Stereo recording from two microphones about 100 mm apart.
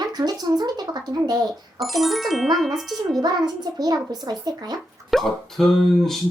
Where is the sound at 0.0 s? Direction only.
45° right (ahead or behind).